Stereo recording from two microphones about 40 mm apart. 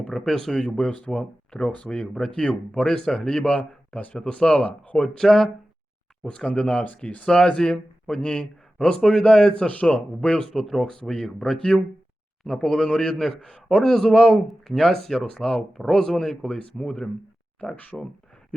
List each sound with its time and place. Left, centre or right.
0.1 s a man's voice: centre
0.8 s a man's voice: left
3.4 s speech: left
4.2 s speech: left
5.0 s a man's voice: centre
6.5 s speech: left
7.3 s a man's voice: centre
9.6 s speech: left
10.5 s a man's voice: centre
11.1 s speech: centre
12.4 s a man's voice: centre; by 17.1 s left
17.6 s speech: left